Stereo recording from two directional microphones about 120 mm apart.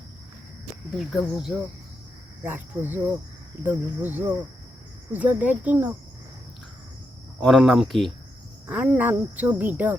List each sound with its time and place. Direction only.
0.9 s speech: centre (ahead or behind)
2.4 s speech: 15° right (ahead or behind)
7.4 s speech: centre (ahead or behind)
8.6 s speech: 10° right (ahead or behind)